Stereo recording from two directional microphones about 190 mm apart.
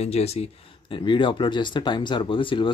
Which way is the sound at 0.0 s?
35° left (ahead or behind).